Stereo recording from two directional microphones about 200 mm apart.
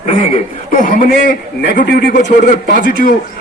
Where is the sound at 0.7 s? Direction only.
40° left (ahead or behind).